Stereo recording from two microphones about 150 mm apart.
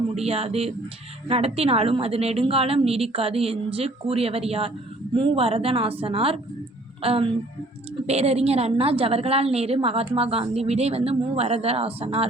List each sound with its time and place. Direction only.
0.1 s a woman's voice: 45° right (ahead or behind)